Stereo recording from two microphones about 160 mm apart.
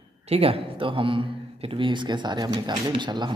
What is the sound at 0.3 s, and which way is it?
A man's voice, 40° right (ahead or behind).